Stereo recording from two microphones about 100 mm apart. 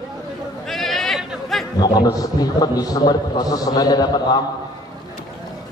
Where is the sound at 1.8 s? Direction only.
40° left (ahead or behind).